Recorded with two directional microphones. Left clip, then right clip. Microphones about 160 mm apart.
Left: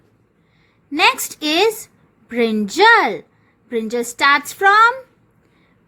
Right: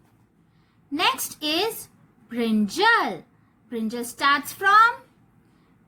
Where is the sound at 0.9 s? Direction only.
35° left (ahead or behind).